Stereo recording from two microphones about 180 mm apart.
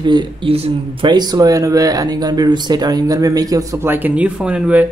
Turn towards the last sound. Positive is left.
turn(degrees=-5)  # may be behind; listen again after turning